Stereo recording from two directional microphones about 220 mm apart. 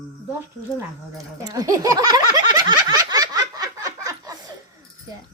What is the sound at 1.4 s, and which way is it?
Snicker, 15° right (ahead or behind).